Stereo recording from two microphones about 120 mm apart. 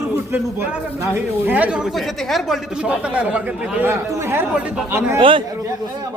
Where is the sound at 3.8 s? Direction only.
20° right (ahead or behind).